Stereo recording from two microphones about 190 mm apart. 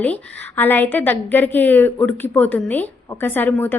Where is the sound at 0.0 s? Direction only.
5° left (ahead or behind).